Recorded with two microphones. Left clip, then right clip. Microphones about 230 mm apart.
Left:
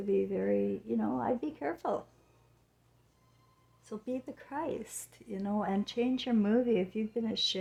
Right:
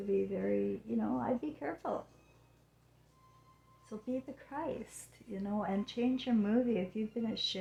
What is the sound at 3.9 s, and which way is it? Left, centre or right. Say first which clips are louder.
Speech: left 2 dB; left.